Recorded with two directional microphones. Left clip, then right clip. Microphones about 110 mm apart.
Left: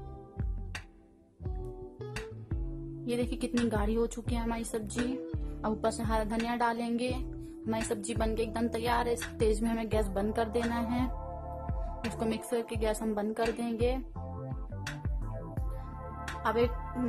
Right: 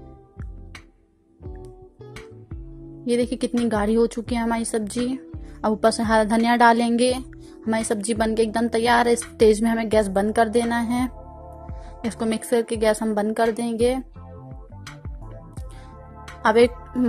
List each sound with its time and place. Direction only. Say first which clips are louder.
3.1 s a woman's voice: right 11 dB; 35° right (ahead or behind); by 7.2 s 50° right (ahead or behind)
7.7 s a woman's voice: right 10 dB; 35° right (ahead or behind)
12.2 s a woman's voice: right 11 dB; 35° right (ahead or behind)